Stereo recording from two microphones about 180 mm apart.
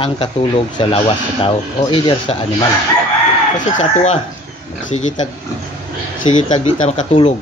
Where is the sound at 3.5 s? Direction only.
40° left (ahead or behind).